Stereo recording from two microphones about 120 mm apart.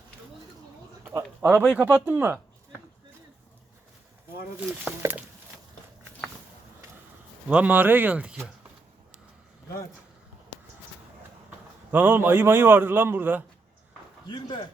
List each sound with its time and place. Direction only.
1.0 s speech: 25° right (ahead or behind)
1.5 s a man's voice: 10° right (ahead or behind)
4.9 s a man's voice: 15° right (ahead or behind)
7.4 s a man's voice: 10° right (ahead or behind)
11.9 s a man's voice: 15° right (ahead or behind)
14.3 s speech: 40° left (ahead or behind)